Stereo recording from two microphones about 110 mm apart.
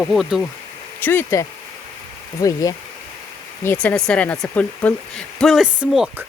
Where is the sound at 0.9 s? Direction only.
20° left (ahead or behind).